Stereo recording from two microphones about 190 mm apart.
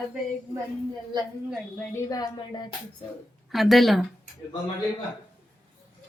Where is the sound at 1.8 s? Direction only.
15° left (ahead or behind).